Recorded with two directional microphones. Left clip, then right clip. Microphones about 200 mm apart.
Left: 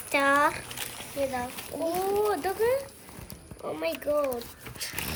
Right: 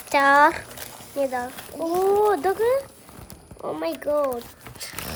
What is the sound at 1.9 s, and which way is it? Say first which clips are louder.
Speech: right 8 dB; 55° right (ahead or behind).